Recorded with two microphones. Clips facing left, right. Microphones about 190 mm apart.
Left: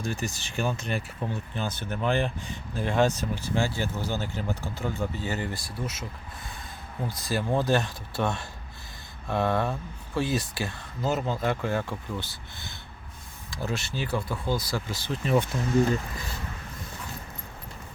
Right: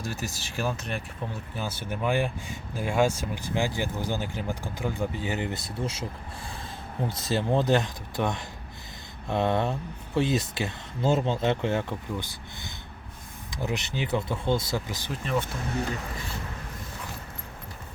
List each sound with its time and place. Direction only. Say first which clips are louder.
0.0 s speech: left 2 dB; 5° right (ahead or behind)
15.2 s speech: left 4 dB; 5° left (ahead or behind)